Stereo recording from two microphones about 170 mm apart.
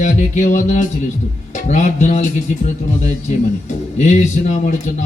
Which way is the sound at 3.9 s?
45° left (ahead or behind).